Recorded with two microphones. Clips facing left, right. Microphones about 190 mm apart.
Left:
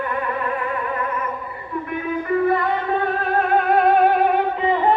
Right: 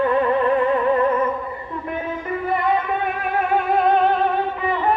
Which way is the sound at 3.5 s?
Centre (ahead or behind).